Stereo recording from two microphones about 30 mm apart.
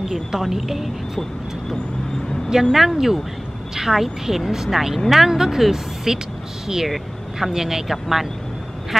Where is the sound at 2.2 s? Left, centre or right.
Left.